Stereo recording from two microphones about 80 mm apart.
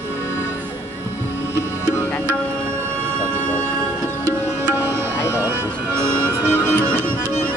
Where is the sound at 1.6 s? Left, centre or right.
Left.